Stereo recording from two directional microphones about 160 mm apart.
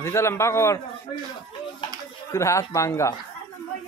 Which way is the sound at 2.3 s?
20° left (ahead or behind).